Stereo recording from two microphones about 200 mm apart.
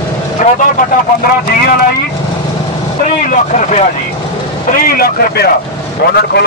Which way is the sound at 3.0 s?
35° left (ahead or behind).